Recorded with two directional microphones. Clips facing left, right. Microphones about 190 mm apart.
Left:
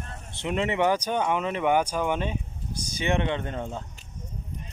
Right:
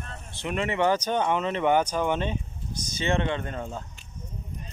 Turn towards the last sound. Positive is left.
turn(degrees=20)  # may be behind; listen again after turning